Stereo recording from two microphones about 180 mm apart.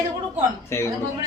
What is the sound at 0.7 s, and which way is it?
Speech, 15° left (ahead or behind).